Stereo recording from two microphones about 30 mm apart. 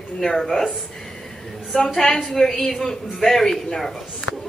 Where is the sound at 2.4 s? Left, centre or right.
Centre.